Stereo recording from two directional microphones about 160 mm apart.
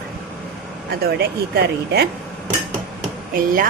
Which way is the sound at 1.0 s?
90° right.